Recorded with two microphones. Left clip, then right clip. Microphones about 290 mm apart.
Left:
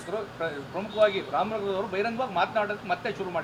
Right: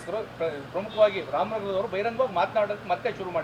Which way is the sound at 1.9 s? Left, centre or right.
Left.